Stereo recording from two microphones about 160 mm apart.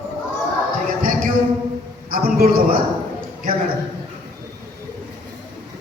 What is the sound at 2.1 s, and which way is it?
Speech, 70° right (ahead or behind).